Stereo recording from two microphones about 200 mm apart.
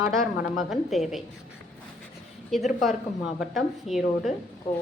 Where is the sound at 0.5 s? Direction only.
Centre (ahead or behind).